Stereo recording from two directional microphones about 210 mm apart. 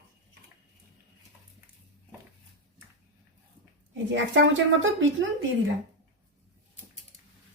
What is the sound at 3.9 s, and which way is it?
A woman's voice, 60° right (ahead or behind).